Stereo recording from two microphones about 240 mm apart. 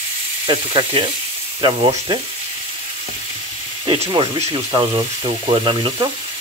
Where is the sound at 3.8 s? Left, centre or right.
Right.